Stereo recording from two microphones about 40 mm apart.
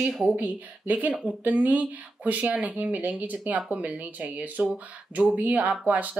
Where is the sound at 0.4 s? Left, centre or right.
Right.